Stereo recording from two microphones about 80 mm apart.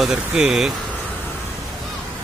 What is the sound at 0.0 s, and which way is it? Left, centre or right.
Speech, centre.